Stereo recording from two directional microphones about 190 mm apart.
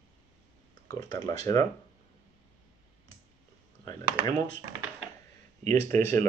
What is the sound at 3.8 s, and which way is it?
Speech, 20° left (ahead or behind).